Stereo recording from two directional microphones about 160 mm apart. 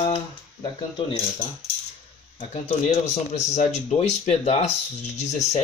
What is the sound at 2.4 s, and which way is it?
Speech, 45° left (ahead or behind).